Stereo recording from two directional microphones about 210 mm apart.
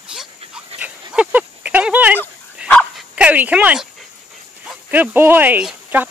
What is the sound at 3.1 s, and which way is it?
Dog, 5° right (ahead or behind).